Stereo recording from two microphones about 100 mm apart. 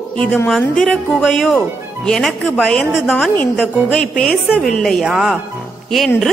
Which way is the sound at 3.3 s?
10° left (ahead or behind).